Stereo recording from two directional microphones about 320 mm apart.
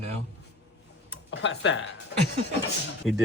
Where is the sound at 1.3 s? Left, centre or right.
Left.